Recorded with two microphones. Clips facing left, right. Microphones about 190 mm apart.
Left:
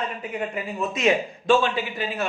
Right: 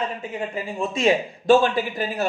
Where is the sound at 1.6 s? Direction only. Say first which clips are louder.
Right 3 dB; 40° right (ahead or behind).